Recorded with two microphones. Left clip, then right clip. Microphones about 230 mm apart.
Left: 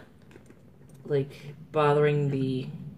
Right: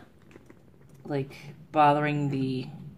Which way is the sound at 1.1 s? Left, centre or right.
Right.